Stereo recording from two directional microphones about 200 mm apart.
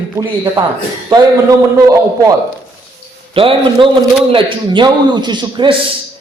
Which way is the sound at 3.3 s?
25° right (ahead or behind).